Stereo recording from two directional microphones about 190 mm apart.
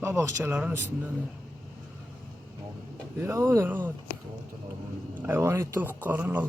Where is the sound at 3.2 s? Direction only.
15° right (ahead or behind).